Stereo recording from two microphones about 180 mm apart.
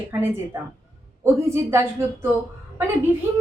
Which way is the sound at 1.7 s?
15° right (ahead or behind).